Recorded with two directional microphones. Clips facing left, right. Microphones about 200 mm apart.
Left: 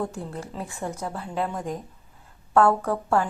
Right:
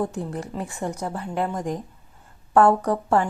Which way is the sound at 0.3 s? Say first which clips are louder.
Right 3 dB; 15° right (ahead or behind).